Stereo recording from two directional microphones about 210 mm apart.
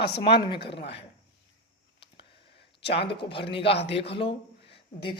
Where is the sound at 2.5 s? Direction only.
55° left (ahead or behind).